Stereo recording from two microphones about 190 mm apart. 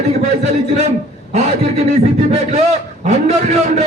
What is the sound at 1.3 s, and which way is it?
A man's voice, 35° right (ahead or behind).